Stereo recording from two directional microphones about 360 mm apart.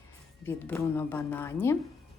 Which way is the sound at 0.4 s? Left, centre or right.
Centre.